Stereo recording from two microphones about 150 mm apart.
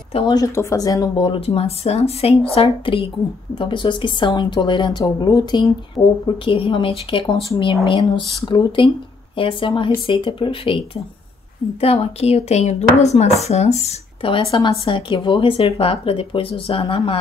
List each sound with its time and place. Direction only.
0.3 s speech: 20° left (ahead or behind)
11.8 s speech: 40° left (ahead or behind)